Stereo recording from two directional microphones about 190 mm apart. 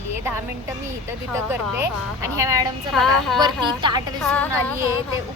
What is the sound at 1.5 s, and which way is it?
A woman's voice, 10° right (ahead or behind).